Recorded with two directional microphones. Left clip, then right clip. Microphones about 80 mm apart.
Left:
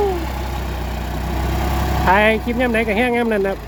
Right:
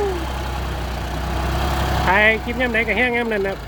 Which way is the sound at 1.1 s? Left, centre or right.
Centre.